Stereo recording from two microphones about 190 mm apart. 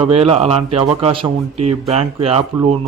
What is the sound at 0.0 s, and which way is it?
Speech, 30° right (ahead or behind).